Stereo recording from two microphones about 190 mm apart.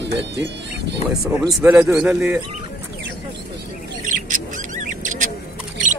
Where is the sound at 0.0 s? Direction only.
65° right (ahead or behind).